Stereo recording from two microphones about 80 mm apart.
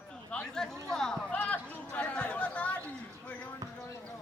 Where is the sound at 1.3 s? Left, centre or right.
Centre.